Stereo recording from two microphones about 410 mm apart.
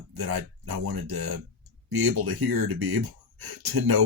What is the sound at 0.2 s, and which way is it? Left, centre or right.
Speech, right.